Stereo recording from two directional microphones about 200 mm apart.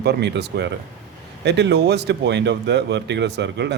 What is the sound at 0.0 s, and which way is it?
Speech, 55° right (ahead or behind).